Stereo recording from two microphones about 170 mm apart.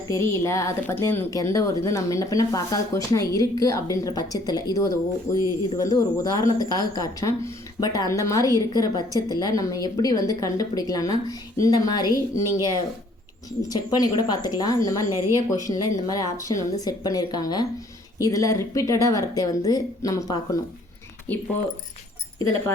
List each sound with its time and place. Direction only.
0.1 s speech: 15° left (ahead or behind)
13.6 s speech: 20° left (ahead or behind)